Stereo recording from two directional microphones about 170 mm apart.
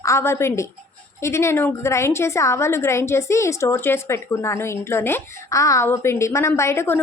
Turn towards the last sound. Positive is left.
turn(degrees=15)  # may be behind; listen again after turning